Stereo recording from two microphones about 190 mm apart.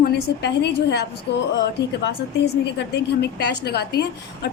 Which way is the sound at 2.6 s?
60° left (ahead or behind).